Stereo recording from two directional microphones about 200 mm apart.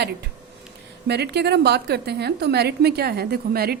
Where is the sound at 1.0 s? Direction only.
55° right (ahead or behind).